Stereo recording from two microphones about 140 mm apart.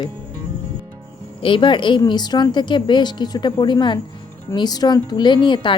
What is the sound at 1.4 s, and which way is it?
A woman's voice, 35° left (ahead or behind).